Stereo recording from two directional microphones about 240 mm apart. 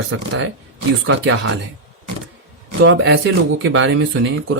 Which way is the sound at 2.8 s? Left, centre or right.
Right.